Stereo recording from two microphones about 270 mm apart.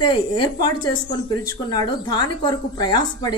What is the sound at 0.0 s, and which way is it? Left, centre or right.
A woman's voice, centre.